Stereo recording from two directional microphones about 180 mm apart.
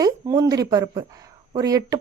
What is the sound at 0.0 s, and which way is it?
Speech, 20° right (ahead or behind).